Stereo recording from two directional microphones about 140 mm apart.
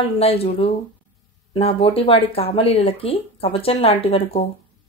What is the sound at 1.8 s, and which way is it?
Speech, 45° left (ahead or behind).